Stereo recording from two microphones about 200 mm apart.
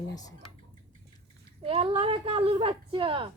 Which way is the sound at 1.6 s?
30° right (ahead or behind).